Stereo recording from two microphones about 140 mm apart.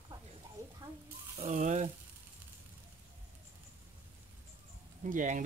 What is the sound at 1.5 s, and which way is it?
Speech, 60° right (ahead or behind).